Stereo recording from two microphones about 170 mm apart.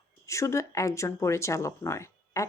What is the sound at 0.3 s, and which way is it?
Speech, 15° left (ahead or behind).